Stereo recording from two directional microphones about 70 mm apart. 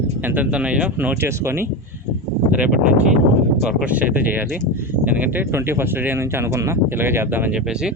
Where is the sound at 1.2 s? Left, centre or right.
Right.